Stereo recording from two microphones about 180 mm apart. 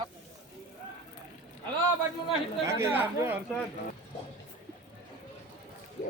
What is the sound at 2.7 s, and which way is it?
Speech, 15° right (ahead or behind).